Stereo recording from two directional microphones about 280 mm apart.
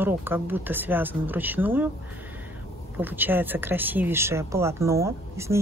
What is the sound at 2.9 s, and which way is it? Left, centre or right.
Speech, centre.